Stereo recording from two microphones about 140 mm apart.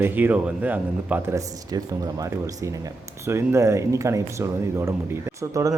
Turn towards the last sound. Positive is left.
turn(degrees=-20)  # may be behind; listen again after turning